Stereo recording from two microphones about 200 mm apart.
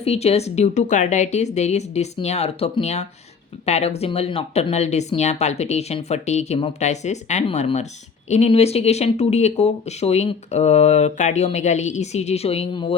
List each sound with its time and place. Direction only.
0.0 s speech: 30° left (ahead or behind)